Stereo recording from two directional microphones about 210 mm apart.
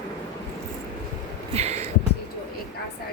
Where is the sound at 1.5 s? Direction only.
30° right (ahead or behind).